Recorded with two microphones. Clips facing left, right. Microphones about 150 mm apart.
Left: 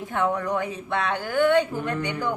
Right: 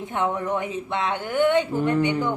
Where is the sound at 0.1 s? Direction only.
20° right (ahead or behind).